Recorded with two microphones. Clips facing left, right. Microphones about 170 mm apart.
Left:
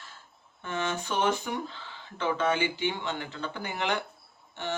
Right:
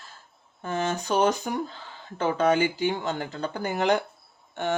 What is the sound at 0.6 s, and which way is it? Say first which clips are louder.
Speech: right 4 dB; 40° right (ahead or behind).